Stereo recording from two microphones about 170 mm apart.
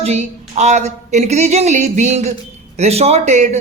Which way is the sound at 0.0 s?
40° right (ahead or behind).